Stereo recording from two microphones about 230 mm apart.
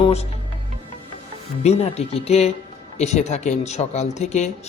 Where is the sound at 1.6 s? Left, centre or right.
Left.